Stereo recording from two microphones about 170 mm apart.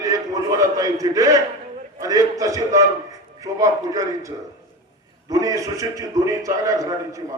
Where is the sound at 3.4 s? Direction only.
20° right (ahead or behind).